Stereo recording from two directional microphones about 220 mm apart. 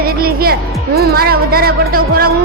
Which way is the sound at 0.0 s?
45° right (ahead or behind).